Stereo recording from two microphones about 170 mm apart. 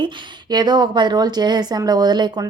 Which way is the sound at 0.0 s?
25° right (ahead or behind).